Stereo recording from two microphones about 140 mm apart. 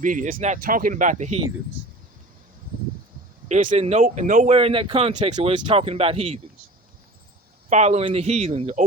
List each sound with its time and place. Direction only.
0.0 s speech: 70° right (ahead or behind)
0.3 s speech: 60° right (ahead or behind)
3.5 s speech: 60° right (ahead or behind)
4.5 s speech: 40° right (ahead or behind)
7.7 s speech: 55° right (ahead or behind)